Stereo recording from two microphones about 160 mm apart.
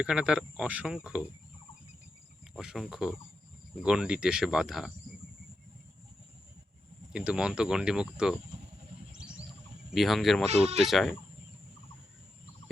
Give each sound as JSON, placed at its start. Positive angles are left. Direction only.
{"t": 0.0, "sound": "speech", "side_deg": -5}
{"t": 2.6, "sound": "speech", "side_deg": 0}
{"t": 7.1, "sound": "speech", "side_deg": -5}
{"t": 9.9, "sound": "speech", "side_deg": 0}
{"t": 10.4, "sound": "speech", "side_deg": -40}
{"t": 10.8, "sound": "speech", "side_deg": 0}